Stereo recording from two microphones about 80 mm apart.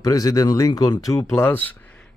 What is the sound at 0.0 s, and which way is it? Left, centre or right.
Speech, left.